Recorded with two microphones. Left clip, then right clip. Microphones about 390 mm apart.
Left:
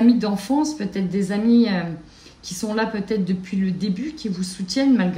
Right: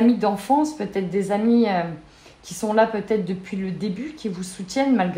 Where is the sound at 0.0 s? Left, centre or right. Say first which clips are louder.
Even; centre.